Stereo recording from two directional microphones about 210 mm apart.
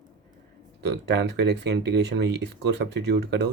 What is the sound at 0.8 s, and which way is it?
Speech, 55° right (ahead or behind).